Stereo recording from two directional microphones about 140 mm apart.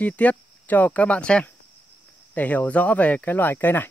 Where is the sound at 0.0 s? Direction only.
10° left (ahead or behind).